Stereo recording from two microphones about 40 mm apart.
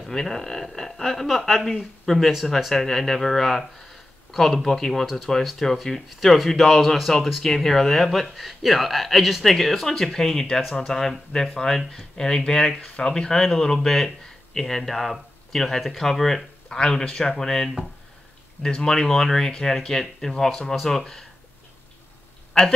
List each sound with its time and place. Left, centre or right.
0.0 s speech: centre
16.6 s speech: centre
22.5 s speech: centre